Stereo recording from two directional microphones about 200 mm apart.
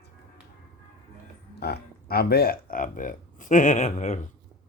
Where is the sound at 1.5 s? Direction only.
55° left (ahead or behind); by 4.3 s 35° left (ahead or behind).